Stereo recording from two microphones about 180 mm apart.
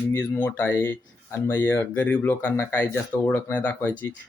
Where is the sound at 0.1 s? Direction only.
15° left (ahead or behind).